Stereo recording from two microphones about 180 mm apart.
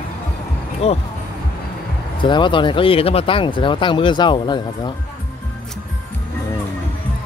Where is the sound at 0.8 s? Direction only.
35° left (ahead or behind).